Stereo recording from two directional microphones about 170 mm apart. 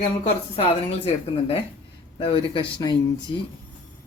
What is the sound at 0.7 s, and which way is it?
A woman's voice, 35° left (ahead or behind).